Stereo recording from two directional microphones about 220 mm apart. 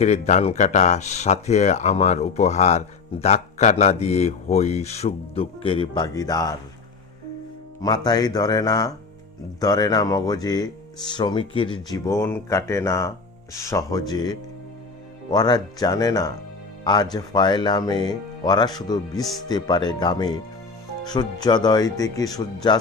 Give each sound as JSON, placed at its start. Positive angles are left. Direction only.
{"t": 0.0, "sound": "speech", "side_deg": 30}
{"t": 7.8, "sound": "speech", "side_deg": 20}